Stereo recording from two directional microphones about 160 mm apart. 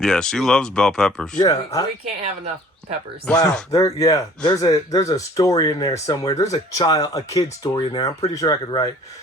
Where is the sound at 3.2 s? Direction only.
5° left (ahead or behind).